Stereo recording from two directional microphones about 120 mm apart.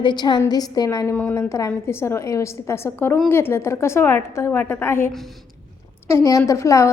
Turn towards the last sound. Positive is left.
turn(degrees=25)  # may be behind; listen again after turning